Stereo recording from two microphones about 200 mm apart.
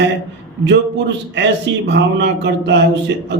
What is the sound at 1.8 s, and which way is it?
A man's voice, 60° right (ahead or behind).